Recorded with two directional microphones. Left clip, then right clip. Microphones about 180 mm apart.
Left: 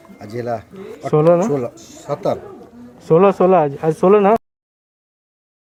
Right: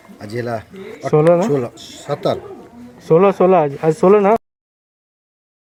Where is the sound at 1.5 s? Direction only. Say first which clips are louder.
Right 2 dB; 30° right (ahead or behind).